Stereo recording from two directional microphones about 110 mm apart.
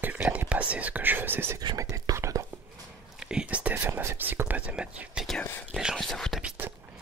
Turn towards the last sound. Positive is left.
turn(degrees=5)  # may be behind; listen again after turning